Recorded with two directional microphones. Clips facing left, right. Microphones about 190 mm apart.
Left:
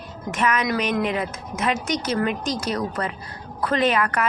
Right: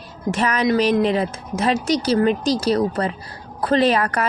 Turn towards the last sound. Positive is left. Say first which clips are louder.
# right 4 dB
turn(degrees=-35)  # may be behind; listen again after turning